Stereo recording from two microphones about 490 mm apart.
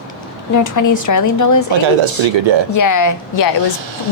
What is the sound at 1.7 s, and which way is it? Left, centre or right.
Speech, right.